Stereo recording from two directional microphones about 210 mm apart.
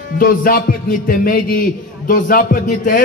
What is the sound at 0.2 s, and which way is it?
A man's voice, 40° left (ahead or behind).